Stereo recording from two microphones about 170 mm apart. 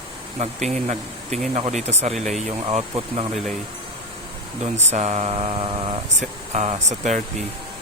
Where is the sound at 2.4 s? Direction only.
40° right (ahead or behind).